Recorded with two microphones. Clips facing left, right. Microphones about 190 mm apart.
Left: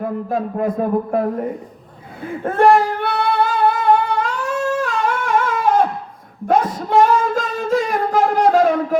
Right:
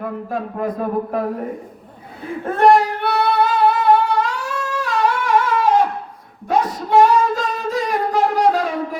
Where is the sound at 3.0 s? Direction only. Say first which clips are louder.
Right 1 dB; 50° left (ahead or behind).